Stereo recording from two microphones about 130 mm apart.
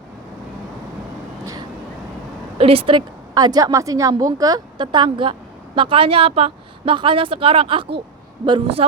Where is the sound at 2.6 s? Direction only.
45° right (ahead or behind).